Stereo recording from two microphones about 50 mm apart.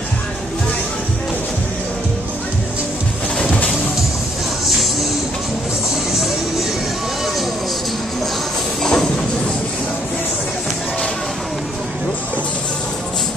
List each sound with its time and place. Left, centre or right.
3.4 s music: left
8.8 s train: centre